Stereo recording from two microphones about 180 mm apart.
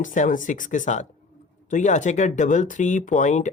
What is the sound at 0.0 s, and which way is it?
Speech, 45° left (ahead or behind).